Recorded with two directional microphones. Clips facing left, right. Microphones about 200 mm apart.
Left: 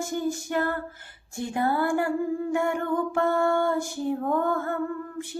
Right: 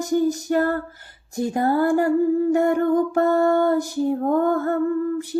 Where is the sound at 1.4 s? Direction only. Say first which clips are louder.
Right 6 dB; 40° right (ahead or behind).